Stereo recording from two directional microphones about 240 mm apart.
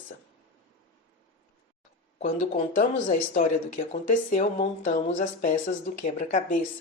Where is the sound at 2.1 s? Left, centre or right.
Left.